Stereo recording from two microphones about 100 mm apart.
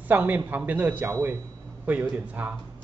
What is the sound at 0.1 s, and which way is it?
A man's voice, 15° right (ahead or behind).